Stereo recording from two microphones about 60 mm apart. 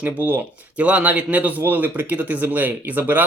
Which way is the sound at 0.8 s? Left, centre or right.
Right.